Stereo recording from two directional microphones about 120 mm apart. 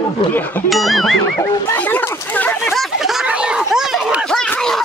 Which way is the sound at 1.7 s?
15° left (ahead or behind).